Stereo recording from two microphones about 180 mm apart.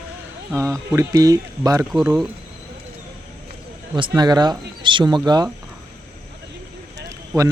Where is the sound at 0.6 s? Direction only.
15° right (ahead or behind).